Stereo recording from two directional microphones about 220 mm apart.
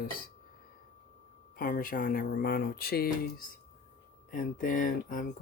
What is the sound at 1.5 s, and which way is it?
Speech, 40° left (ahead or behind).